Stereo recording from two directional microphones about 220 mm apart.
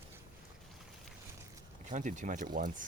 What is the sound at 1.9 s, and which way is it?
Speech, 35° right (ahead or behind).